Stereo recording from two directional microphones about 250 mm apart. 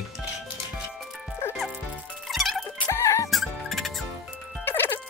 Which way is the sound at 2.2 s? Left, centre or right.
Centre.